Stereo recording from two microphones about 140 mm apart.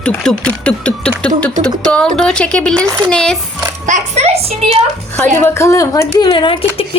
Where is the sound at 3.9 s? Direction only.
55° right (ahead or behind).